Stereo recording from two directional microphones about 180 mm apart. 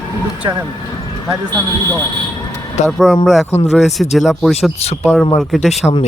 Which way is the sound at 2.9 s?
Centre (ahead or behind).